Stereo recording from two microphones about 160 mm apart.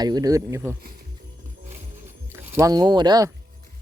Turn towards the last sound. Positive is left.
turn(degrees=-25)  # may be behind; listen again after turning